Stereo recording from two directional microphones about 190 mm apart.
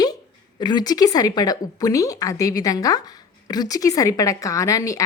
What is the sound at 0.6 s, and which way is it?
Speech, 20° left (ahead or behind).